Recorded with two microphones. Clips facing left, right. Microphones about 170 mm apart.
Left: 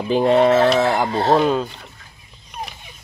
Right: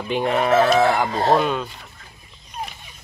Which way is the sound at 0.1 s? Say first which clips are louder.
Left 5 dB; 30° left (ahead or behind).